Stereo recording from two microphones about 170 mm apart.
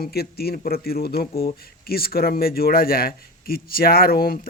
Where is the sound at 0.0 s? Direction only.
65° left (ahead or behind).